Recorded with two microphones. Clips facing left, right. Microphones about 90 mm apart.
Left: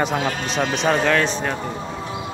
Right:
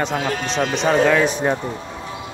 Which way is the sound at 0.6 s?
5° right (ahead or behind).